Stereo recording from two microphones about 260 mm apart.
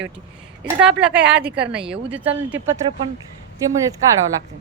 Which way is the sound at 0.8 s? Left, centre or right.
Centre.